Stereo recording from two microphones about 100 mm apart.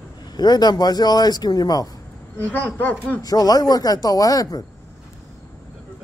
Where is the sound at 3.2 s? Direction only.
40° left (ahead or behind).